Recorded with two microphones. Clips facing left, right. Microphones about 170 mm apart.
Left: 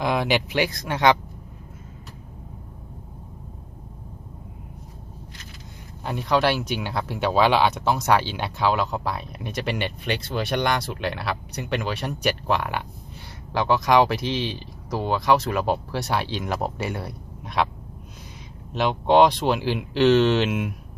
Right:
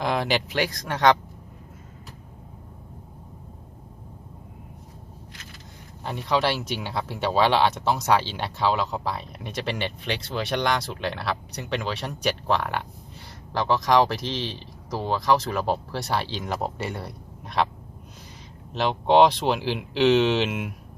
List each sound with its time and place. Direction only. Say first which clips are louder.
0.0 s speech: left 2 dB; 5° left (ahead or behind)
6.0 s speech: left 2 dB; centre (ahead or behind)
18.7 s speech: left 1 dB; centre (ahead or behind)